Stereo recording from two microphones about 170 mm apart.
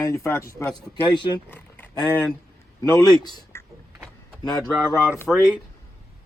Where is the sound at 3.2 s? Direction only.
25° left (ahead or behind).